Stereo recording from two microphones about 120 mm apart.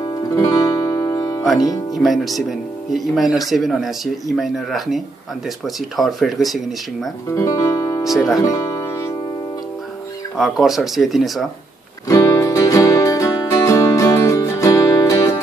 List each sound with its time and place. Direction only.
0.3 s music: 25° left (ahead or behind)
1.4 s speech: centre (ahead or behind)
7.2 s speech: 25° left (ahead or behind)
8.0 s speech: centre (ahead or behind)
8.5 s music: 25° left (ahead or behind)
10.3 s speech: centre (ahead or behind)
12.1 s music: 25° left (ahead or behind)